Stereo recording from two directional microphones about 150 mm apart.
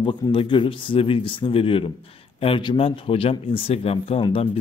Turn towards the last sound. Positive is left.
turn(degrees=40)  # may be behind; listen again after turning